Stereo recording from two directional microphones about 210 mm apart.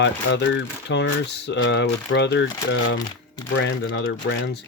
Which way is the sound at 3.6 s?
60° left (ahead or behind).